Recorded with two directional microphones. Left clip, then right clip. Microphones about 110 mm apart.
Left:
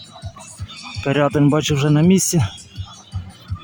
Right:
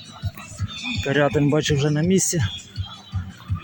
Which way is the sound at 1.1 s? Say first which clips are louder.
Left 3 dB; 35° left (ahead or behind).